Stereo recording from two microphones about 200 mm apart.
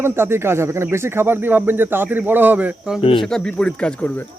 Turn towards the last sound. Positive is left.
turn(degrees=5)  # may be behind; listen again after turning